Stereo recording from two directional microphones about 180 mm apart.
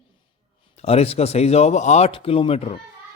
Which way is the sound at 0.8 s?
35° left (ahead or behind).